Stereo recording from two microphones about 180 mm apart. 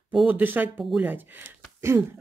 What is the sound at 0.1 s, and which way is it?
Speech, 5° right (ahead or behind).